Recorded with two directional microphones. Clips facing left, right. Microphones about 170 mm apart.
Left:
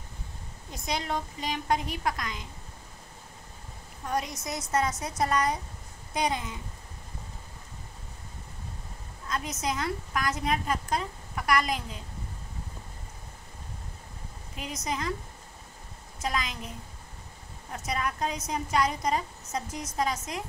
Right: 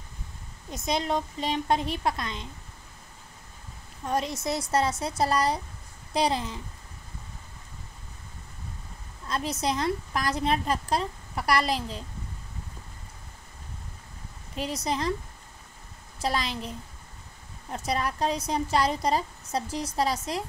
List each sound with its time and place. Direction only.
0.7 s a woman's voice: 20° right (ahead or behind)
4.1 s a woman's voice: 25° right (ahead or behind)
9.3 s a woman's voice: 30° right (ahead or behind)
14.6 s a woman's voice: 30° right (ahead or behind)
16.2 s a woman's voice: 35° right (ahead or behind)
17.7 s a woman's voice: 30° right (ahead or behind)